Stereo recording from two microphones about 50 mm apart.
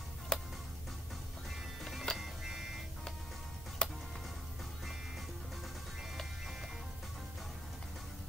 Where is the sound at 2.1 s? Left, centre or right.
Centre.